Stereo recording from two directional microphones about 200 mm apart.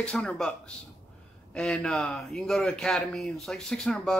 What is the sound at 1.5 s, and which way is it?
Speech, 5° left (ahead or behind).